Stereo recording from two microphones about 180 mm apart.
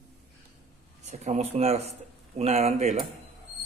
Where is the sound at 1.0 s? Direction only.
40° right (ahead or behind).